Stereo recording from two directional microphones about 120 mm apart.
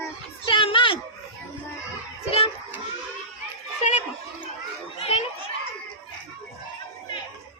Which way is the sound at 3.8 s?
75° left (ahead or behind).